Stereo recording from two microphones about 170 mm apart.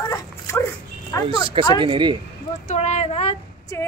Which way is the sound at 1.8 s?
30° right (ahead or behind).